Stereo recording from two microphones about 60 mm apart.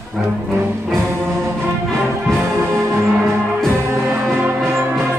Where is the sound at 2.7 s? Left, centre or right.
Right.